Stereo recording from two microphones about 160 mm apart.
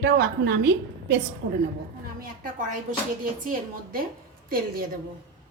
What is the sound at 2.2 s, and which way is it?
Speech, 55° right (ahead or behind).